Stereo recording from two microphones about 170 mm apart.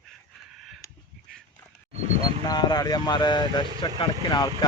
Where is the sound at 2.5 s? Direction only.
25° left (ahead or behind).